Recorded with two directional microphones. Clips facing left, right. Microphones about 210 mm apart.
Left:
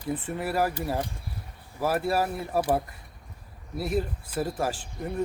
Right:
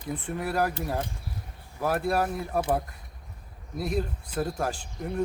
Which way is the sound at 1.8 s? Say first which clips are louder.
Even; 5° left (ahead or behind).